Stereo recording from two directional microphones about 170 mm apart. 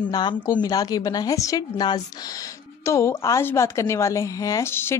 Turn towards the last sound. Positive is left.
turn(degrees=15)  # may be behind; listen again after turning